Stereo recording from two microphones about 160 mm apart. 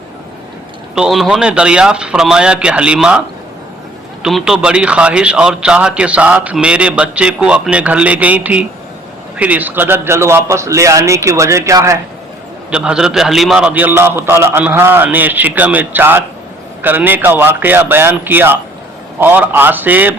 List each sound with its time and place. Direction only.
0.9 s a man's voice: centre (ahead or behind); by 11.9 s 20° right (ahead or behind)
12.7 s speech: 5° right (ahead or behind)